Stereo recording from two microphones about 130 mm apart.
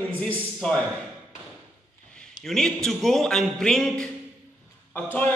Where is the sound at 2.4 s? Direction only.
5° left (ahead or behind).